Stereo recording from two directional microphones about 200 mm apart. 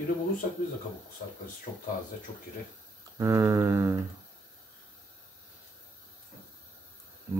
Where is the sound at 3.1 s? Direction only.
15° right (ahead or behind).